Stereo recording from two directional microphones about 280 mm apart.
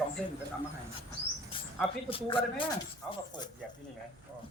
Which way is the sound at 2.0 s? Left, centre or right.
Centre.